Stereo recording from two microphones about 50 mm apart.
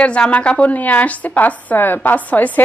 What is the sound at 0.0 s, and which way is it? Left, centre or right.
A woman's voice, left.